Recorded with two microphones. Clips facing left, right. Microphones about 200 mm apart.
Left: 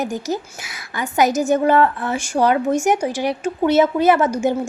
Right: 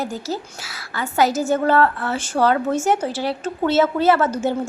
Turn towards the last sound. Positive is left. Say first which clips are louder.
# left 2 dB
turn(degrees=15)  # may be behind; listen again after turning